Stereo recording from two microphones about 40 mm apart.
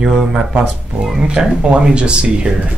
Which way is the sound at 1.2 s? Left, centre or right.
Right.